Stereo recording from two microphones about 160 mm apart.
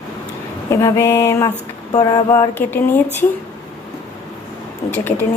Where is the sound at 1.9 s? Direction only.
25° left (ahead or behind).